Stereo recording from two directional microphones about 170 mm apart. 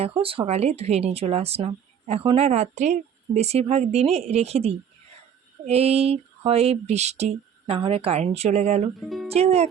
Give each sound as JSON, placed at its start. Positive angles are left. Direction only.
{"t": 0.0, "sound": "speech", "side_deg": -35}
{"t": 9.0, "sound": "speech", "side_deg": 0}
{"t": 9.3, "sound": "speech", "side_deg": -35}